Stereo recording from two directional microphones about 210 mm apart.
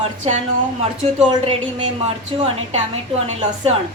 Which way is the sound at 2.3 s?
25° right (ahead or behind).